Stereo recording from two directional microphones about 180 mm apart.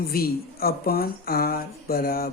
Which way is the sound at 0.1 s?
55° left (ahead or behind).